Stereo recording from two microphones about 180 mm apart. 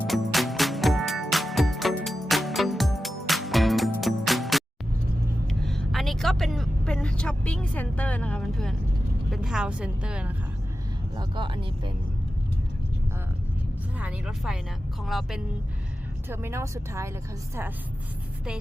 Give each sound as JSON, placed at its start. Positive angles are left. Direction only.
{"t": 0.1, "sound": "music", "side_deg": 0}
{"t": 5.5, "sound": "vehicle", "side_deg": 0}
{"t": 9.3, "sound": "speech", "side_deg": -5}
{"t": 11.2, "sound": "speech", "side_deg": -25}
{"t": 14.0, "sound": "speech", "side_deg": -5}
{"t": 16.3, "sound": "speech", "side_deg": -15}